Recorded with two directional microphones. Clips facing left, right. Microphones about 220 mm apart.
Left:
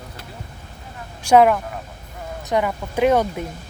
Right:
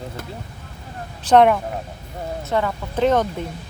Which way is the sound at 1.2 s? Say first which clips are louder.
Even; 10° left (ahead or behind).